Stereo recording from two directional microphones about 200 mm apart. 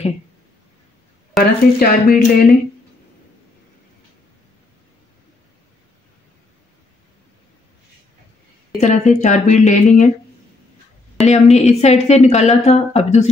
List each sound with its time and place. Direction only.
1.4 s speech: 45° left (ahead or behind)
8.7 s speech: 35° left (ahead or behind)
11.2 s speech: 35° left (ahead or behind)